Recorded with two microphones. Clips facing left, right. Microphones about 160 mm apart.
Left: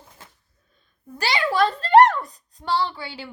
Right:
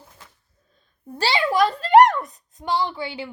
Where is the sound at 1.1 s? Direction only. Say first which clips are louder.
Right 2 dB; 30° right (ahead or behind).